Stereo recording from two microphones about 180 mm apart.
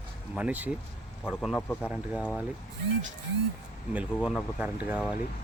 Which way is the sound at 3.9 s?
5° right (ahead or behind).